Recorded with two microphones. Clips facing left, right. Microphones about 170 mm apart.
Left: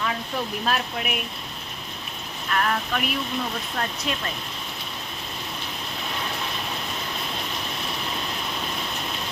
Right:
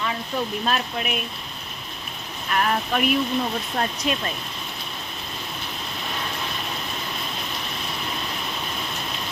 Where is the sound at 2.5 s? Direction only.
20° right (ahead or behind).